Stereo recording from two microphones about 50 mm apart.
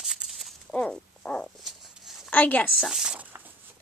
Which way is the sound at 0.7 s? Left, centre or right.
Left.